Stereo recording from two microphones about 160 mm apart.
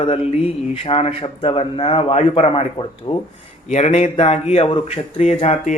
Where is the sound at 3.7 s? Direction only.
45° left (ahead or behind).